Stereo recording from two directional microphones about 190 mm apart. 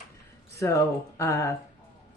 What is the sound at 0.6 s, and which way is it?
Speech, 15° left (ahead or behind).